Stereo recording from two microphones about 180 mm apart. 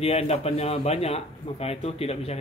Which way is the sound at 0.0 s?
35° left (ahead or behind).